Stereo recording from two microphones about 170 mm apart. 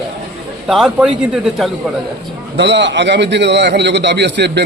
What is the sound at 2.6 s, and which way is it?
A man's voice, 90° right.